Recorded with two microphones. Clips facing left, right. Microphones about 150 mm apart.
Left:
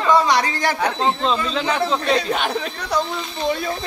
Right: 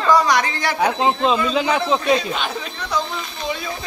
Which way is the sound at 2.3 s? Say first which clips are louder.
Left 3 dB; 60° left (ahead or behind).